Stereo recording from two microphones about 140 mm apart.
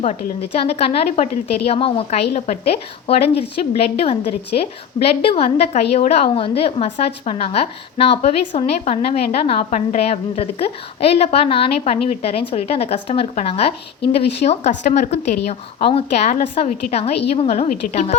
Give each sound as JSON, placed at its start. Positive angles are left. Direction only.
{"t": 0.9, "sound": "speech", "side_deg": 55}